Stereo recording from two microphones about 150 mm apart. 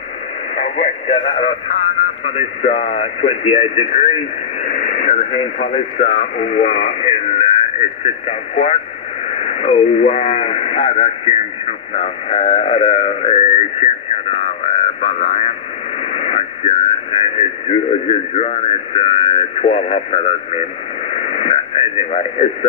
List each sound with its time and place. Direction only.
0.6 s speech: 50° left (ahead or behind)
11.9 s a sound: 45° left (ahead or behind)
16.1 s speech: 45° left (ahead or behind)
21.1 s radio: 45° left (ahead or behind)